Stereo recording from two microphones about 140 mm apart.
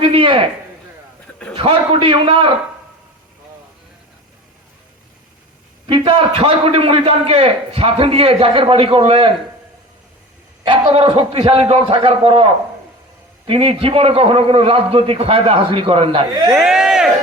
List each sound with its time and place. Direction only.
0.0 s a man's voice: 40° right (ahead or behind)
1.5 s a man's voice: 40° right (ahead or behind)
5.8 s a man's voice: 40° right (ahead or behind)
10.7 s a man's voice: 35° right (ahead or behind)
16.5 s speech: 5° right (ahead or behind)